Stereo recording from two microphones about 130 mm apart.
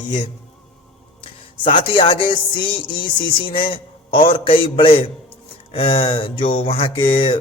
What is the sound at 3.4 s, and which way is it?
A man's voice, 40° left (ahead or behind).